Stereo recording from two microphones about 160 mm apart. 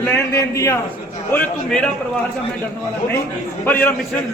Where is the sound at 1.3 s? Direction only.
10° left (ahead or behind).